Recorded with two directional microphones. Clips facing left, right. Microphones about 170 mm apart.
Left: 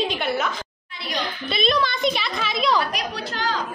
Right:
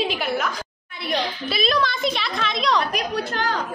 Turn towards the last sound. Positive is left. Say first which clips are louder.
# right 3 dB
turn(degrees=-55)  # may be behind; listen again after turning